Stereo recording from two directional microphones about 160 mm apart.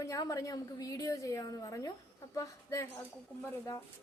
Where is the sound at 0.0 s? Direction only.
20° left (ahead or behind).